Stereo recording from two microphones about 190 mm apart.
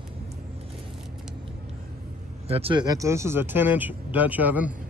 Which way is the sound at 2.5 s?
30° right (ahead or behind).